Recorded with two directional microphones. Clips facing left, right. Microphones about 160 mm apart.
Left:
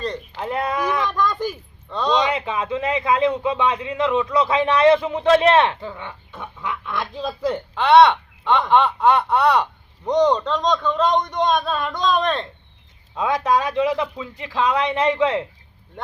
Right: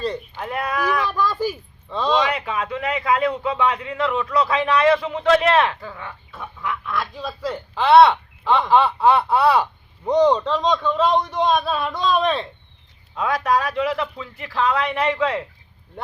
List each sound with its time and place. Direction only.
0.3 s a man's voice: 25° left (ahead or behind)
1.0 s speech: 5° right (ahead or behind)
2.1 s a man's voice: 20° left (ahead or behind)
7.5 s a man's voice: 5° right (ahead or behind)
13.1 s a man's voice: 20° left (ahead or behind)